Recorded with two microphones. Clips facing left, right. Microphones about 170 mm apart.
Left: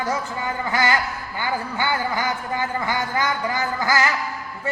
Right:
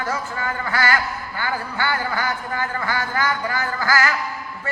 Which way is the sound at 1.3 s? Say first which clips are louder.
Left 1 dB; 15° left (ahead or behind).